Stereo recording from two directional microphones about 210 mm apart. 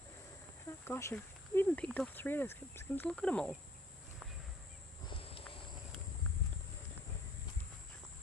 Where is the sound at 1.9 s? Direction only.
10° left (ahead or behind).